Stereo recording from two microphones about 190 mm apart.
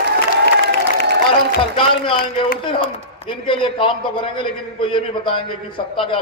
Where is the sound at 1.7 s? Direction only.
25° left (ahead or behind).